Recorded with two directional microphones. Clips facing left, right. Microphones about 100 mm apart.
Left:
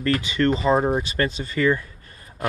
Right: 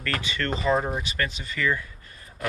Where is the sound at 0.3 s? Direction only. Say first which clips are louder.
Left 4 dB; 20° left (ahead or behind).